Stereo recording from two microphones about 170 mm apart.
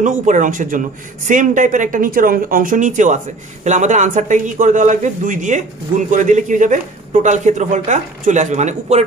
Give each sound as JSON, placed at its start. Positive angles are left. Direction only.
{"t": 0.0, "sound": "speech", "side_deg": -45}